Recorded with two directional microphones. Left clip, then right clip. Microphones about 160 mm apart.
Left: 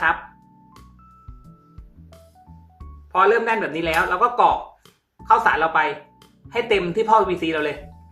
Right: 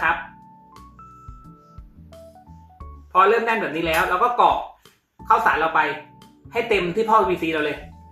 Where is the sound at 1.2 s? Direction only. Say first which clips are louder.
Right 5 dB; centre (ahead or behind).